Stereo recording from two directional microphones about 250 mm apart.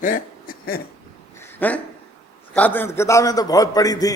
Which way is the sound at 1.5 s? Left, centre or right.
Centre.